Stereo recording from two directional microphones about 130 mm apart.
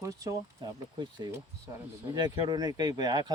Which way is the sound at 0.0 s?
25° right (ahead or behind).